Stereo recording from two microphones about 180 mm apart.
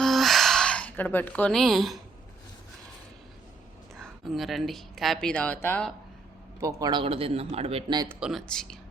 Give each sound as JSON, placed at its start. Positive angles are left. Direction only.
{"t": 0.0, "sound": "a sound", "side_deg": 0}
{"t": 4.0, "sound": "speech", "side_deg": 0}
{"t": 6.6, "sound": "speech", "side_deg": -20}
{"t": 8.0, "sound": "speech", "side_deg": -10}
{"t": 8.3, "sound": "speech", "side_deg": 0}